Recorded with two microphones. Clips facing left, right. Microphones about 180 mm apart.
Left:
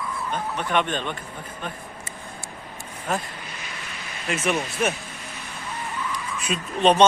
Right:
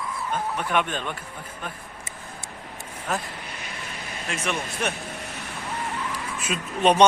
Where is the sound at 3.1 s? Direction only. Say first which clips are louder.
Left 2 dB; centre (ahead or behind).